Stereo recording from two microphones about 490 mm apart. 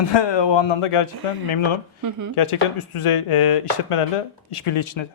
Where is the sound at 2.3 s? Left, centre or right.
Left.